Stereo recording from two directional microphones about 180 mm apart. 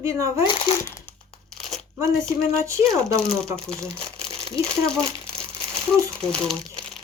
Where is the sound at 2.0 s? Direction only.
15° right (ahead or behind).